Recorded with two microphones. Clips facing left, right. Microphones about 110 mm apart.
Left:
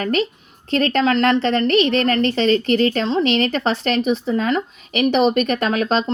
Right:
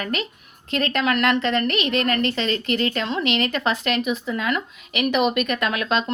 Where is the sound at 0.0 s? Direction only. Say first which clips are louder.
Left 7 dB; 35° left (ahead or behind).